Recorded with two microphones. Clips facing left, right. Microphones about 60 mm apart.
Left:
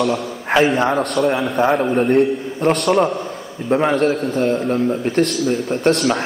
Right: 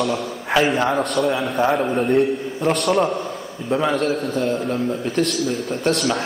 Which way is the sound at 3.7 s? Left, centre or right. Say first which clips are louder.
Left 4 dB; left.